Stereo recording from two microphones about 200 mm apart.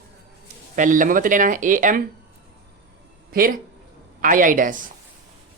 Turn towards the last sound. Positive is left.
turn(degrees=-40)  # may be behind; listen again after turning